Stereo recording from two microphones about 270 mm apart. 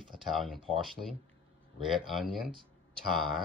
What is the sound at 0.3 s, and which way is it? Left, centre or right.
Speech, centre.